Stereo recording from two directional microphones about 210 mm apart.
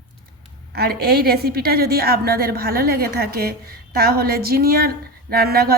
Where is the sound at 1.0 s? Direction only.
50° right (ahead or behind).